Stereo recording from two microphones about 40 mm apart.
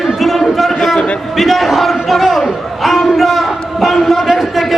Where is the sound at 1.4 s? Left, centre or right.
Centre.